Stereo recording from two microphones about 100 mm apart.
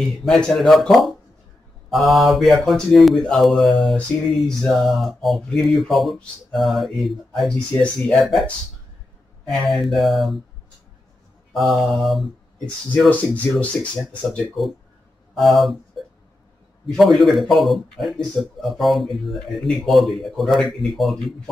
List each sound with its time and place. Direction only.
0.2 s a man's voice: 5° left (ahead or behind)
7.5 s speech: 10° left (ahead or behind)
9.5 s a man's voice: centre (ahead or behind)
11.5 s a man's voice: centre (ahead or behind)
13.1 s speech: 15° left (ahead or behind)
14.6 s a man's voice: centre (ahead or behind)
16.8 s a man's voice: centre (ahead or behind)